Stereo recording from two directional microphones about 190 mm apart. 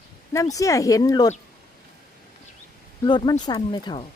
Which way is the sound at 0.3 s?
15° left (ahead or behind).